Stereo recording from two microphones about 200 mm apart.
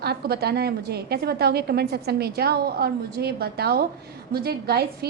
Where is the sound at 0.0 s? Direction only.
50° right (ahead or behind).